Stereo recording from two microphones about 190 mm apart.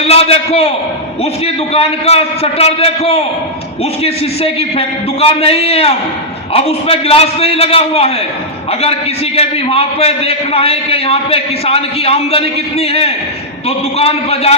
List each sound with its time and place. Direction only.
0.0 s a man's voice: 30° left (ahead or behind)
1.7 s a man's voice: 30° left (ahead or behind)
5.4 s a man's voice: 30° left (ahead or behind)